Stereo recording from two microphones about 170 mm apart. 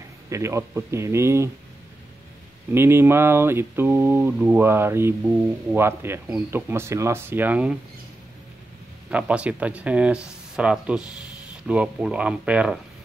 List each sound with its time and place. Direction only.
0.3 s speech: 15° right (ahead or behind)
2.7 s speech: 15° right (ahead or behind)
9.1 s speech: 5° right (ahead or behind)